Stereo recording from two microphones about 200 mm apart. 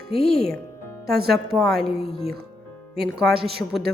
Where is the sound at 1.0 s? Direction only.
50° right (ahead or behind).